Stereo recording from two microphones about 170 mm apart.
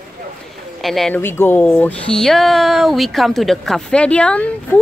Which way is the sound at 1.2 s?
15° left (ahead or behind).